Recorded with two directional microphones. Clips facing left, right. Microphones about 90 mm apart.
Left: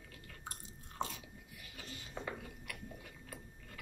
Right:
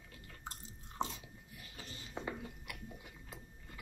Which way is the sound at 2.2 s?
20° right (ahead or behind).